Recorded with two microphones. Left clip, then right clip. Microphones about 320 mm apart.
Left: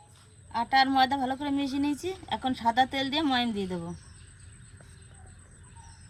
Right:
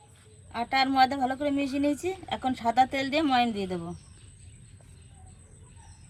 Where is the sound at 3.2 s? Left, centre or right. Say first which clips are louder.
Right 3 dB; centre.